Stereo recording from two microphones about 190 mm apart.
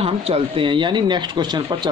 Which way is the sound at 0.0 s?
30° right (ahead or behind).